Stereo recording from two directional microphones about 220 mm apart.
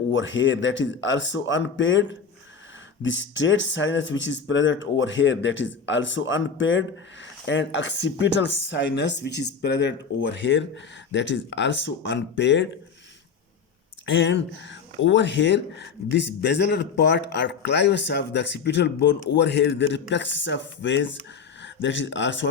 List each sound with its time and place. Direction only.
0.1 s speech: 55° left (ahead or behind)
14.0 s speech: 55° left (ahead or behind)